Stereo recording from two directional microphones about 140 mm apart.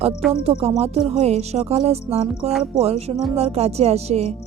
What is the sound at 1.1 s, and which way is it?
A woman's voice, 50° right (ahead or behind).